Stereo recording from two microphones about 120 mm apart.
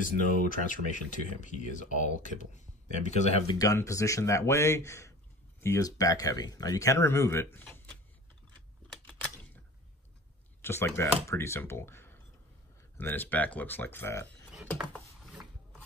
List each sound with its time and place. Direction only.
0.0 s speech: 90° left; by 3.4 s 65° left (ahead or behind)
3.5 s speech: 25° left (ahead or behind)
8.9 s typewriter: 10° left (ahead or behind)
10.6 s speech: 20° left (ahead or behind)